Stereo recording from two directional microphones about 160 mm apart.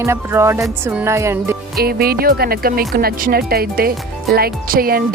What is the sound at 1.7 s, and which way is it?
Speech, 70° right (ahead or behind).